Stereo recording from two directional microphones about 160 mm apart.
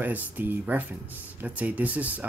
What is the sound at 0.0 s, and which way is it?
Speech, 10° right (ahead or behind).